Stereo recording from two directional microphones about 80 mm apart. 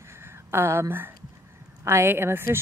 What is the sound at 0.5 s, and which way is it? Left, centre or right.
Speech, right.